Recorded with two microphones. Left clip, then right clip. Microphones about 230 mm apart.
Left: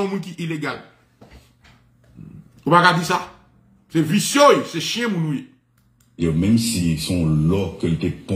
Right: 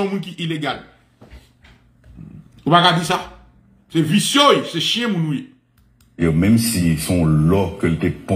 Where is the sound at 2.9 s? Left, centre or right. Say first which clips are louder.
Right 1 dB; centre.